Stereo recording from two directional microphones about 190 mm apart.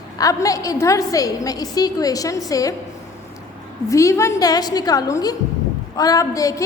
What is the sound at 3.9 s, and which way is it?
A woman's voice, 15° left (ahead or behind).